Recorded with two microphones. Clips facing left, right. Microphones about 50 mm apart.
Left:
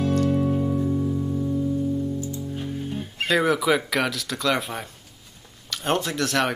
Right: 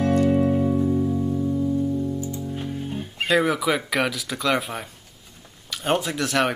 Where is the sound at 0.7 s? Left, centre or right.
Centre.